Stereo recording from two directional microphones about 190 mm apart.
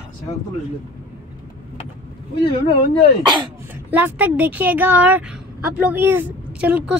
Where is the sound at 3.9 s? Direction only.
10° right (ahead or behind).